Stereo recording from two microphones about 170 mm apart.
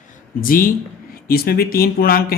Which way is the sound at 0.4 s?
55° left (ahead or behind).